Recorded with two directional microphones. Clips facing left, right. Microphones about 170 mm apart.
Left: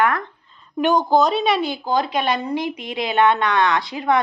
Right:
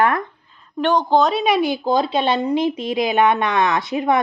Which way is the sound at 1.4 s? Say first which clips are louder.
Right 3 dB; 15° right (ahead or behind).